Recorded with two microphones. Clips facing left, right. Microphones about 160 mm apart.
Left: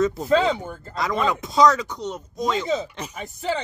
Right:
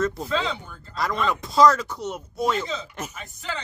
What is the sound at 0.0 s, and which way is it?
Speech, centre (ahead or behind).